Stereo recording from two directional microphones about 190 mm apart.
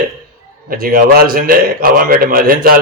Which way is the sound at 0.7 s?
50° right (ahead or behind).